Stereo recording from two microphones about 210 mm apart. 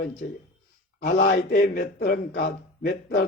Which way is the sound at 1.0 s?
40° left (ahead or behind).